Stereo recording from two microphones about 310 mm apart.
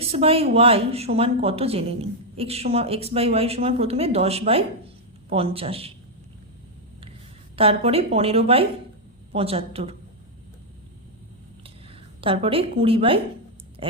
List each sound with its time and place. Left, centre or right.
0.0 s speech: centre
7.5 s speech: centre
12.2 s speech: centre
13.8 s a sound: centre